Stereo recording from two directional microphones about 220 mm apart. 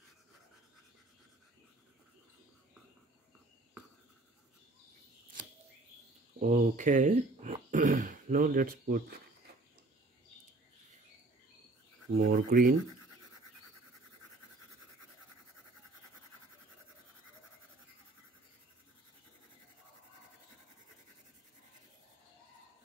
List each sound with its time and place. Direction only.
6.4 s throat clearing: 35° right (ahead or behind)
12.2 s speech: 40° right (ahead or behind)